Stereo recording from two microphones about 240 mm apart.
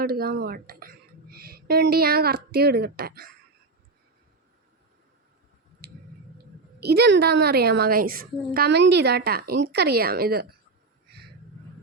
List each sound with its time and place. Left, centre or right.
0.0 s a woman's voice: right
5.8 s a sound: right
6.7 s speech: right